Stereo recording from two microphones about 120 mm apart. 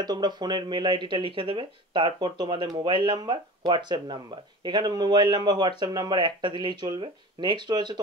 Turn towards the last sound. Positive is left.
turn(degrees=-35)  # may be behind; listen again after turning